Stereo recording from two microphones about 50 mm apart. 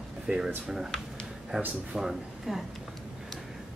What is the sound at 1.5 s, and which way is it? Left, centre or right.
Speech, centre.